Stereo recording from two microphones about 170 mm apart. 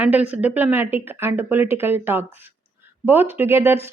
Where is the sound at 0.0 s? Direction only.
10° right (ahead or behind).